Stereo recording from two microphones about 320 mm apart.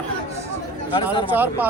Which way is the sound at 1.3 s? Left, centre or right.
Centre.